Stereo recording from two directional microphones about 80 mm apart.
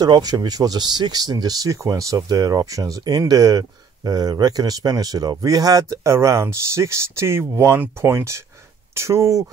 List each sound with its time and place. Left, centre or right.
0.0 s speech: right